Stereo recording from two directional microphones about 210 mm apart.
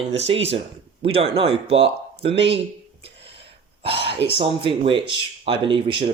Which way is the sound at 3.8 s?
25° right (ahead or behind).